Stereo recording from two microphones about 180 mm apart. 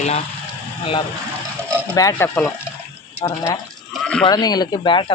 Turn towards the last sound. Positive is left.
turn(degrees=25)  # may be behind; listen again after turning